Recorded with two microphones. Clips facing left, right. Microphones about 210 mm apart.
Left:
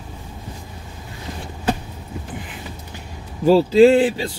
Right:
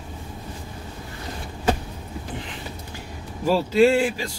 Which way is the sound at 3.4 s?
30° left (ahead or behind).